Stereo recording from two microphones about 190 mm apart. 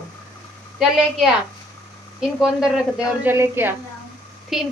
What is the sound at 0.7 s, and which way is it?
Speech, centre (ahead or behind).